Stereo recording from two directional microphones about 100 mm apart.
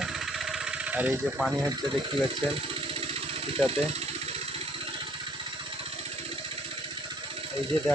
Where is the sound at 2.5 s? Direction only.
65° right (ahead or behind); by 4.4 s 85° right.